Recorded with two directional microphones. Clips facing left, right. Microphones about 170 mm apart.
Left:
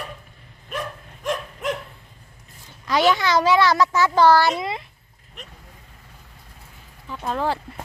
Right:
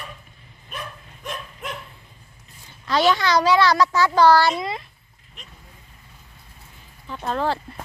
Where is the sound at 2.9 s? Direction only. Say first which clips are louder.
Even; 20° left (ahead or behind).